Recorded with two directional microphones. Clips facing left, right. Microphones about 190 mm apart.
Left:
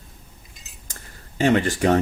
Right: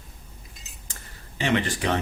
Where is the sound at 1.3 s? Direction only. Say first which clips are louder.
Left 6 dB; 45° left (ahead or behind).